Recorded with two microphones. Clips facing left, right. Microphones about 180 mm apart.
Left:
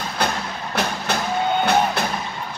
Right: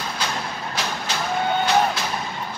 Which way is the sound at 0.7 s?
60° left (ahead or behind).